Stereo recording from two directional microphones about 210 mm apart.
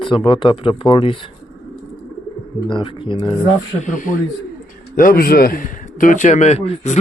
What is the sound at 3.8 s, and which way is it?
A man's voice, 40° left (ahead or behind).